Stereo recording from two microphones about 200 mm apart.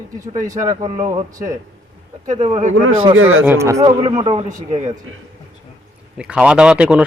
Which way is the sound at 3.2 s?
90° right.